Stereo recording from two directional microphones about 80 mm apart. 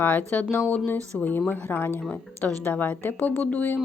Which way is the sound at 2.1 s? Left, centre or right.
Centre.